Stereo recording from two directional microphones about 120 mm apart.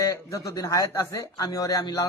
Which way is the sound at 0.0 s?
25° left (ahead or behind).